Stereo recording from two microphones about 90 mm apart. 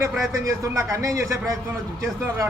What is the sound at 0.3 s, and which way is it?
A man's voice, 35° right (ahead or behind).